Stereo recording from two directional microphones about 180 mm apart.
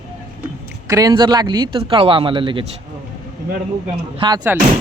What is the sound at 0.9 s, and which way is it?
A man's voice, 20° right (ahead or behind).